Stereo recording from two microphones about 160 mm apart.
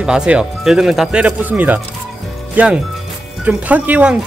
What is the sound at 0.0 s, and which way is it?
Speech, 5° right (ahead or behind).